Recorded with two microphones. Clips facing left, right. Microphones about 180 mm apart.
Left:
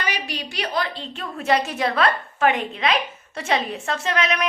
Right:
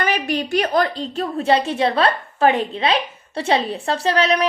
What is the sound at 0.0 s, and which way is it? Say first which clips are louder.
A woman's voice: right 8 dB; 50° right (ahead or behind).